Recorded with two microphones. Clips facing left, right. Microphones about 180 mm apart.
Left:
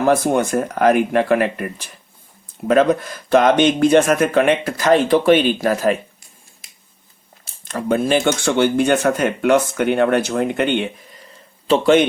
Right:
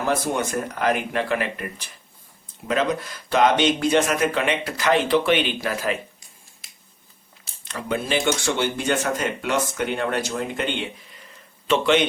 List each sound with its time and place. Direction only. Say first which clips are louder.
0.0 s speech: left 7 dB; 50° left (ahead or behind)
2.6 s speech: left 8 dB; 50° left (ahead or behind)
7.6 s speech: left 8 dB; 45° left (ahead or behind)
11.1 s a sound: left 4 dB; 35° left (ahead or behind)